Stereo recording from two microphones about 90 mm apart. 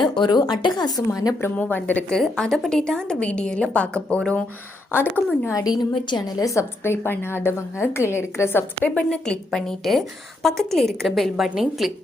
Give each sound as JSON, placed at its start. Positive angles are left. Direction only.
{"t": 0.0, "sound": "speech", "side_deg": 55}
{"t": 1.5, "sound": "a woman's voice", "side_deg": 15}
{"t": 2.1, "sound": "a woman's voice", "side_deg": 5}
{"t": 5.5, "sound": "a woman's voice", "side_deg": 40}
{"t": 5.9, "sound": "a woman's voice", "side_deg": 55}
{"t": 6.4, "sound": "a woman's voice", "side_deg": 35}
{"t": 9.0, "sound": "a woman's voice", "side_deg": 5}